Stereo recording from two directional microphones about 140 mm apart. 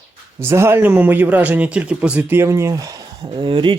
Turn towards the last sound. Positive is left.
turn(degrees=-35)  # may be behind; listen again after turning